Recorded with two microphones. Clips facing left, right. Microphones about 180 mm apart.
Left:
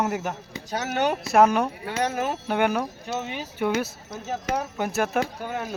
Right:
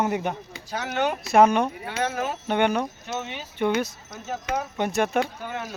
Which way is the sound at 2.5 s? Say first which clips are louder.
Right 2 dB; 5° left (ahead or behind).